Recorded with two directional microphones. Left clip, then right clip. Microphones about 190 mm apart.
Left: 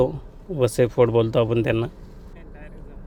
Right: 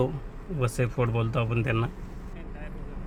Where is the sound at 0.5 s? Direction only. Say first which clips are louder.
Left 11 dB; 40° left (ahead or behind).